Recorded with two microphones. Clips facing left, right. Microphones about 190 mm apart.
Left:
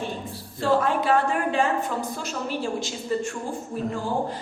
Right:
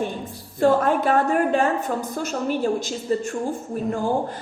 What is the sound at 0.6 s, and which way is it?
Music, 50° right (ahead or behind).